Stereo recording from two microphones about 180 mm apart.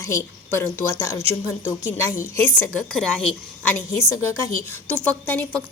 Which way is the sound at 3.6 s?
15° left (ahead or behind).